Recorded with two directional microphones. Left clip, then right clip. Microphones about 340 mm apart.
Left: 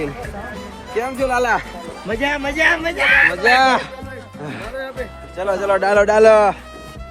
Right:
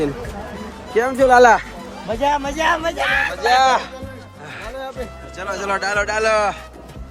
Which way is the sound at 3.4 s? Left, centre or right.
Left.